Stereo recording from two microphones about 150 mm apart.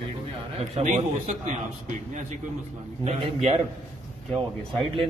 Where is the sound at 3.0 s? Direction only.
40° right (ahead or behind).